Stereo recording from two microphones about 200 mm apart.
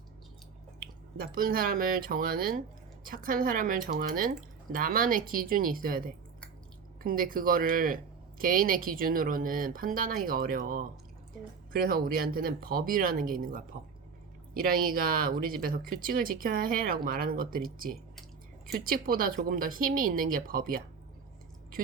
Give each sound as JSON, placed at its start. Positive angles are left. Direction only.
{"t": 0.8, "sound": "speech", "side_deg": -45}